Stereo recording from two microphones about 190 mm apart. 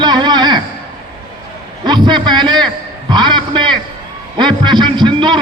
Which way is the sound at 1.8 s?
25° right (ahead or behind).